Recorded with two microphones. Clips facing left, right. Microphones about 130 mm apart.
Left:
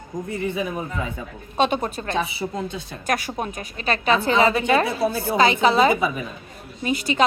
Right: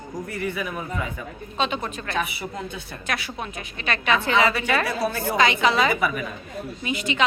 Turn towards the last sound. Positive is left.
turn(degrees=40)  # may be behind; listen again after turning